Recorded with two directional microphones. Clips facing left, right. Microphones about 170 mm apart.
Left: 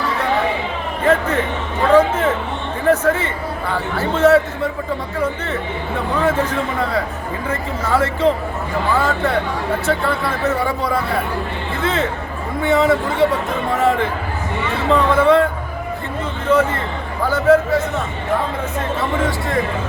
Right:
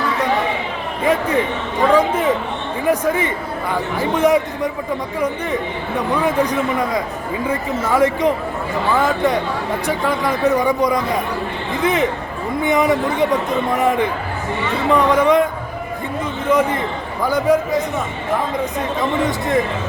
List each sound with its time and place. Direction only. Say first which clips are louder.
1.0 s a man's voice: even; 10° right (ahead or behind)
6.2 s speech: even; 15° right (ahead or behind)
16.5 s speech: left 1 dB; 15° right (ahead or behind)